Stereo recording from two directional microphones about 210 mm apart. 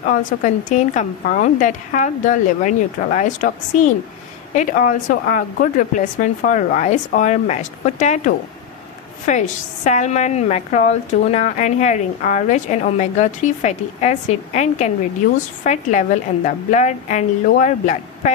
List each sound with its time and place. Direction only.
0.4 s a woman's voice: 35° left (ahead or behind)
9.3 s a woman's voice: 35° left (ahead or behind)